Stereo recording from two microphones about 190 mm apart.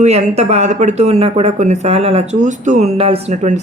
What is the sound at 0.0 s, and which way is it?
Speech, 35° right (ahead or behind).